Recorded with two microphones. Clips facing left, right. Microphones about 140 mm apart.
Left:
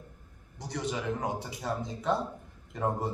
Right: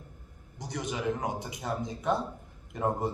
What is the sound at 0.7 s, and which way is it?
Speech, 15° right (ahead or behind).